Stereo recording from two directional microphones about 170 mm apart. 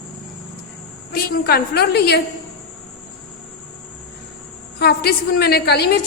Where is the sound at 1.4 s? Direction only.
70° left (ahead or behind).